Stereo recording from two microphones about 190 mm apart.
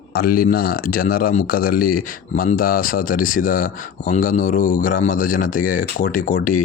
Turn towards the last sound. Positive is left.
turn(degrees=45)  # may be behind; listen again after turning